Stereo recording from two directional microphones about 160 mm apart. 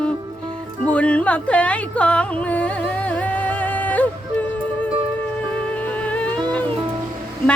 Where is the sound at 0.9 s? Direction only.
10° left (ahead or behind).